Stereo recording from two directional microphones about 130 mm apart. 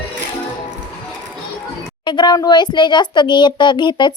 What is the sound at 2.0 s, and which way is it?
A child's voice, 35° left (ahead or behind).